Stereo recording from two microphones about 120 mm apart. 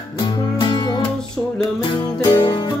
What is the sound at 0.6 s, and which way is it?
Music, 40° left (ahead or behind).